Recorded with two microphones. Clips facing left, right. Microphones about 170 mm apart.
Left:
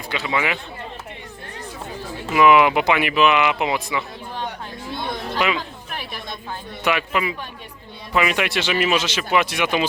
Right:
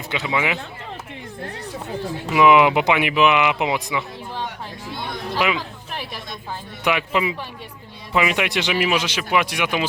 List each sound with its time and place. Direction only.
0.3 s speech: 15° right (ahead or behind)
2.3 s speech: 15° right (ahead or behind)
5.3 s speech: 5° right (ahead or behind)
6.8 s speech: 20° right (ahead or behind)